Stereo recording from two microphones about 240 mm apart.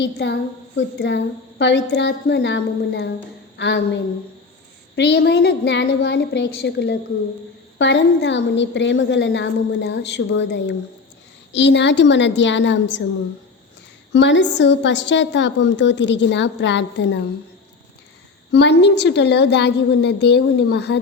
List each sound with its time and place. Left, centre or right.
0.0 s a woman's voice: left
14.1 s a woman's voice: left
18.5 s a woman's voice: left